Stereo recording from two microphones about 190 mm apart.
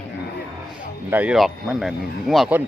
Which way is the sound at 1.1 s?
5° right (ahead or behind).